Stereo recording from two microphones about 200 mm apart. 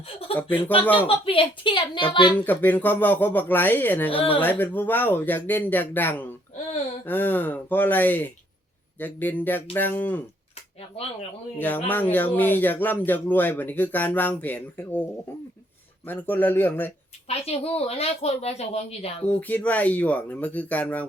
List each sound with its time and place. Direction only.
0.4 s a woman's voice: 25° left (ahead or behind)
2.4 s speech: 10° left (ahead or behind)
11.5 s speech: 10° left (ahead or behind)
16.0 s speech: 10° left (ahead or behind)
17.2 s a woman's voice: 30° left (ahead or behind)
19.2 s speech: 5° left (ahead or behind)